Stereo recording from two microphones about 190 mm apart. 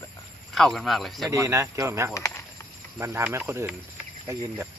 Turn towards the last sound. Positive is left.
turn(degrees=-15)  # may be behind; listen again after turning